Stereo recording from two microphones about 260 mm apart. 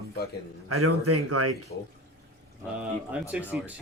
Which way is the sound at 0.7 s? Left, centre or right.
Right.